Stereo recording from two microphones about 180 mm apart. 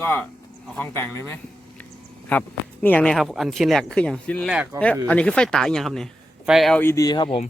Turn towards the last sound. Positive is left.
turn(degrees=25)  # may be behind; listen again after turning